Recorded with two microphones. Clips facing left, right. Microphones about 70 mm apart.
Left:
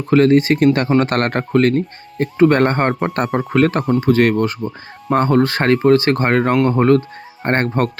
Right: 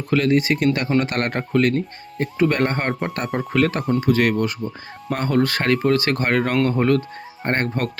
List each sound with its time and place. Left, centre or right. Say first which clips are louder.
0.1 s speech: left 6 dB; left